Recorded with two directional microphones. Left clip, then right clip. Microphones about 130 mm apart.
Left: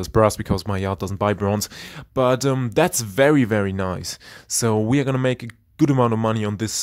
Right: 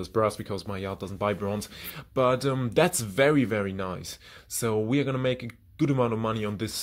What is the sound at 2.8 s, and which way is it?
Speech, 50° left (ahead or behind).